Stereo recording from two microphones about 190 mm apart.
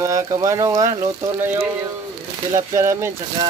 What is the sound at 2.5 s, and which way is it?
Speech, 15° right (ahead or behind).